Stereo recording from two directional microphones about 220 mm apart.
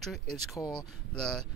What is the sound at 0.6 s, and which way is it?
Speech, 20° left (ahead or behind).